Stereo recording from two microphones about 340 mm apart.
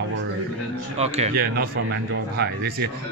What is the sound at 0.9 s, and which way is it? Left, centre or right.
Speech, centre.